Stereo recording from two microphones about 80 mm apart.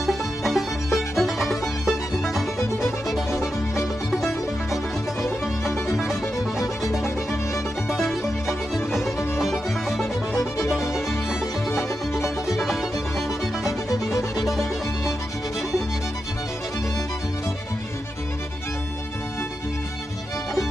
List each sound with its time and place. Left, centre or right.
0.0 s music: centre
3.7 s music: centre
7.9 s music: centre
11.7 s music: left
12.4 s music: centre